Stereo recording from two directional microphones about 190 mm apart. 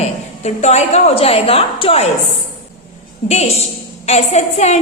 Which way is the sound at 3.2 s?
35° left (ahead or behind).